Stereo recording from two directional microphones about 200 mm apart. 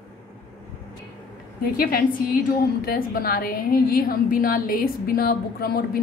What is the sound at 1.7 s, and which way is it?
A woman's voice, 50° left (ahead or behind).